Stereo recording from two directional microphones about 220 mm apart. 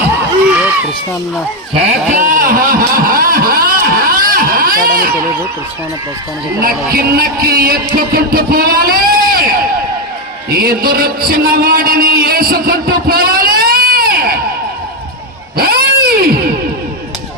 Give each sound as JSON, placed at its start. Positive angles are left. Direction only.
{"t": 2.1, "sound": "speech", "side_deg": -35}
{"t": 6.6, "sound": "speech", "side_deg": -45}
{"t": 10.5, "sound": "a sound", "side_deg": -45}
{"t": 15.5, "sound": "cat", "side_deg": -45}